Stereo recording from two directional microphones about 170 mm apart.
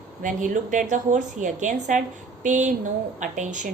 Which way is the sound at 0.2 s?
50° right (ahead or behind).